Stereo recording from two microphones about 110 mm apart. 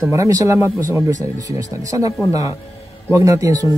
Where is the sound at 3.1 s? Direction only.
30° right (ahead or behind).